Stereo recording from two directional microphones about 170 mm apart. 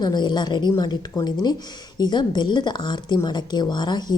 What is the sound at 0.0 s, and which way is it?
Speech, 25° left (ahead or behind).